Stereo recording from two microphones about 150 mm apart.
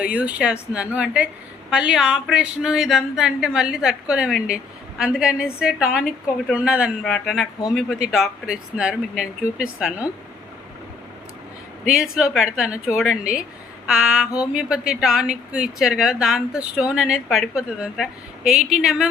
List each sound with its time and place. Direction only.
0.0 s speech: 10° right (ahead or behind)
11.9 s speech: 5° right (ahead or behind)